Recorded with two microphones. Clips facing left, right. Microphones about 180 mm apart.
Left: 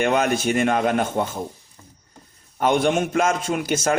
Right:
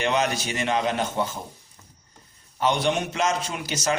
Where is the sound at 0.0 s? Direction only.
50° left (ahead or behind).